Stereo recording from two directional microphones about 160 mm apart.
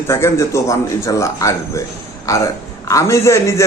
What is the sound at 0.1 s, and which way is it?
A man's voice, 15° left (ahead or behind).